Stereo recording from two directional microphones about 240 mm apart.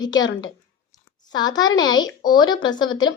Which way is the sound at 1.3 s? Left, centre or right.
Centre.